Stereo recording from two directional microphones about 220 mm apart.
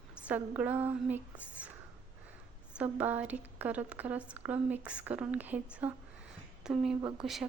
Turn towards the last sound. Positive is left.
turn(degrees=0)  # may be behind; listen again after turning